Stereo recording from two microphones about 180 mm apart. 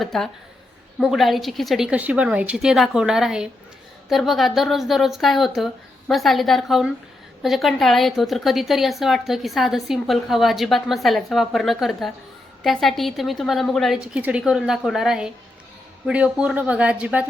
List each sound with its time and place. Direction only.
0.0 s a woman's voice: centre (ahead or behind)